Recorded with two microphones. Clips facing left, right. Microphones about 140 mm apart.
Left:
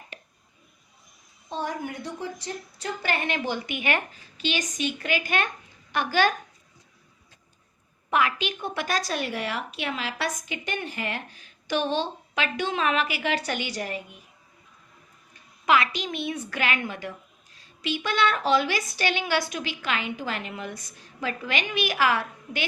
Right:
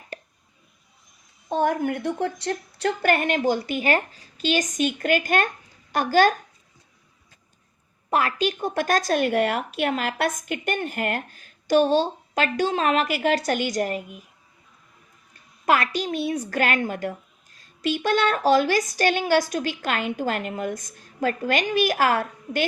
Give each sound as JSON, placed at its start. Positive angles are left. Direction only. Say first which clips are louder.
{"t": 1.5, "sound": "a woman's voice", "louder": "right 9 dB", "side_deg": -55}
{"t": 8.1, "sound": "a woman's voice", "louder": "right 2 dB", "side_deg": -40}
{"t": 15.6, "sound": "a woman's voice", "louder": "right 1 dB", "side_deg": -45}